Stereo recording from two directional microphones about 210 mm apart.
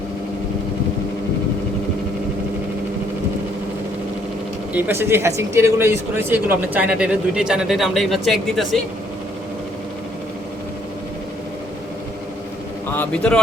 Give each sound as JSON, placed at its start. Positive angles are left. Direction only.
{"t": 4.7, "sound": "speech", "side_deg": -10}
{"t": 12.9, "sound": "speech", "side_deg": 5}